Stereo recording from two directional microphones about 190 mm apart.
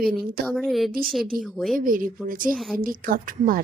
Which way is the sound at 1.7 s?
45° right (ahead or behind).